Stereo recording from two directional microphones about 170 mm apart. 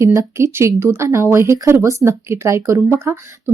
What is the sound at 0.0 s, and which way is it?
Speech, 15° right (ahead or behind).